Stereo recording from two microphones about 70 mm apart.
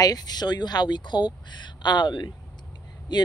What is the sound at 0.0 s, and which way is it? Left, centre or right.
Speech, left.